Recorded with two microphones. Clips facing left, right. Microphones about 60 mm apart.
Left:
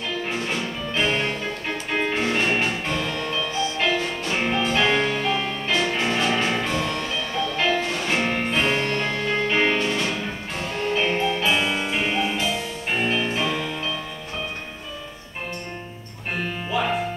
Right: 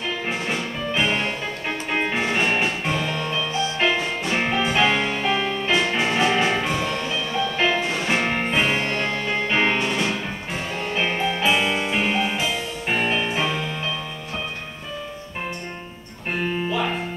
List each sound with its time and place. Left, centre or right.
0.5 s music: centre
13.0 s music: right